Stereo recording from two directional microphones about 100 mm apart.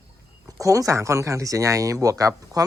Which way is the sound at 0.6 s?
35° right (ahead or behind).